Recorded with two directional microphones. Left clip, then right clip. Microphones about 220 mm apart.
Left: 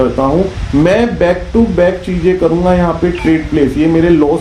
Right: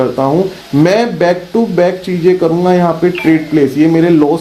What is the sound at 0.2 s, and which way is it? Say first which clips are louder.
Speech: even; 35° right (ahead or behind).